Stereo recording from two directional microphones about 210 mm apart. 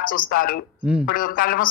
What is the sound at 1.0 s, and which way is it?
Speech, 40° left (ahead or behind).